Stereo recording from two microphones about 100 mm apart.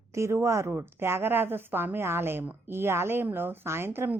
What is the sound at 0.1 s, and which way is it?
A woman's voice, 30° right (ahead or behind).